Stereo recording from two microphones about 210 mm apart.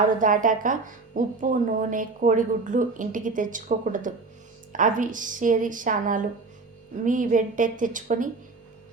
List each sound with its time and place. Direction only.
0.2 s a woman's voice: 40° right (ahead or behind)